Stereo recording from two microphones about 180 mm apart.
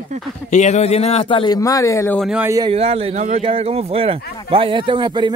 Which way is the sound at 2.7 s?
35° right (ahead or behind).